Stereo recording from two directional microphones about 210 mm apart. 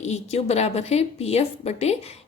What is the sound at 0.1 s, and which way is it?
Speech, 30° left (ahead or behind).